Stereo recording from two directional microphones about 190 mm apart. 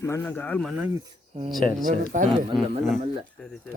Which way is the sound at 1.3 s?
40° right (ahead or behind).